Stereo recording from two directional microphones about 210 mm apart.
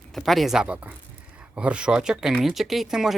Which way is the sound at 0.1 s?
Centre (ahead or behind).